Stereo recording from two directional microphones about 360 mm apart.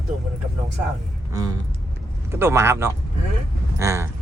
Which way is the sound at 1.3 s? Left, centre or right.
Centre.